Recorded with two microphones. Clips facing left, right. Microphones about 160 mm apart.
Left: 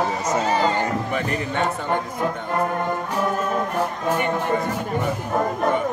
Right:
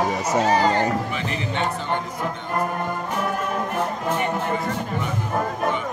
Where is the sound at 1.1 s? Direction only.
50° left (ahead or behind).